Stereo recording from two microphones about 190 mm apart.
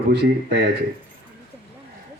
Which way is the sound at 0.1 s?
60° right (ahead or behind).